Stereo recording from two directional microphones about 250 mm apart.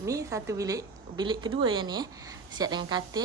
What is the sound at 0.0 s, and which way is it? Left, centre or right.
A woman's voice, centre.